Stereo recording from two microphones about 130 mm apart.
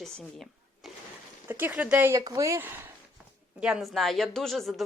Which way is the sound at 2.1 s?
25° right (ahead or behind).